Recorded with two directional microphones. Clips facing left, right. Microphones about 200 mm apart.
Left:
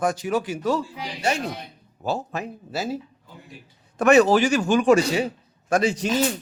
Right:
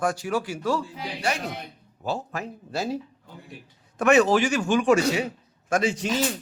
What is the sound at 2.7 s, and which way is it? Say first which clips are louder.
Speech: right 1 dB; 5° left (ahead or behind).